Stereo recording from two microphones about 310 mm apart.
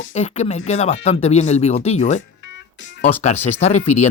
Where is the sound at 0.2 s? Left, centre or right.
Left.